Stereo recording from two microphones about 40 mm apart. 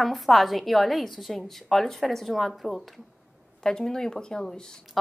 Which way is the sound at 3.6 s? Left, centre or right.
Centre.